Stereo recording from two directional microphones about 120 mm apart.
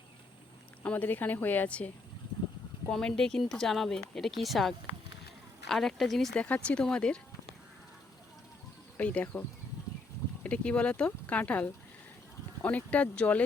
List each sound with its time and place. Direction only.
0.8 s speech: 15° left (ahead or behind)
2.9 s speech: 5° left (ahead or behind)
9.0 s speech: 10° left (ahead or behind)
10.4 s speech: 10° left (ahead or behind)